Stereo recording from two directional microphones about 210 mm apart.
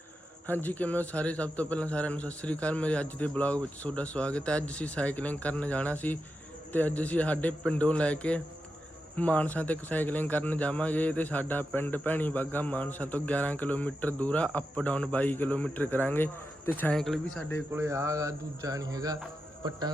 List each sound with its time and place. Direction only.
0.4 s a man's voice: 10° left (ahead or behind)
17.7 s speech: 10° right (ahead or behind)